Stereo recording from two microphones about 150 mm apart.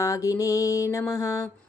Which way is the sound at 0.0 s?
20° left (ahead or behind).